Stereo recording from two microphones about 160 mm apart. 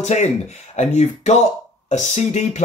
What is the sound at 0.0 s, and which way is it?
Speech, 45° left (ahead or behind).